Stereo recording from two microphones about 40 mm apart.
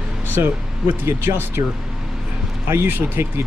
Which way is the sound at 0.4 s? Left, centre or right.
Right.